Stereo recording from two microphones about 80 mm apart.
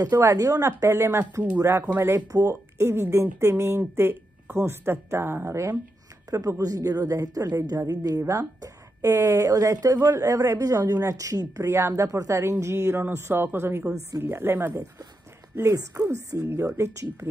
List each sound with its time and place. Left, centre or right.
0.0 s speech: right
6.3 s a woman's voice: right
16.0 s a woman's voice: right
16.4 s speech: right